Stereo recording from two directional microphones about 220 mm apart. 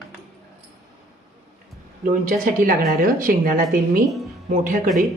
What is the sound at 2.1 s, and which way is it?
Speech, 40° right (ahead or behind).